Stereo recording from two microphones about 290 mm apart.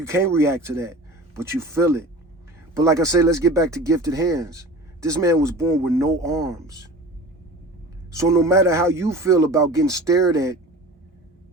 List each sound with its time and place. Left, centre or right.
0.0 s speech: centre
8.1 s speech: centre